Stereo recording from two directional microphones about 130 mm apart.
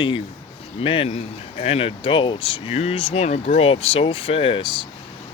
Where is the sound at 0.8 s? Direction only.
45° left (ahead or behind).